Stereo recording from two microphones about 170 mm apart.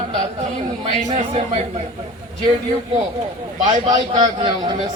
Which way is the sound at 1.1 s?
40° right (ahead or behind).